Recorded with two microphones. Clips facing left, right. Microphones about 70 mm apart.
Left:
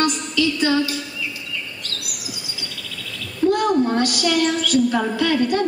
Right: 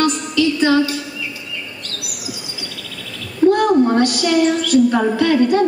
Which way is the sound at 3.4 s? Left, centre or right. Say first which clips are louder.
Right 5 dB; centre.